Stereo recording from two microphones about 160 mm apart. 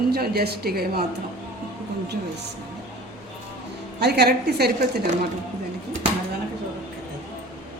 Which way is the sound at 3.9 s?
90° right.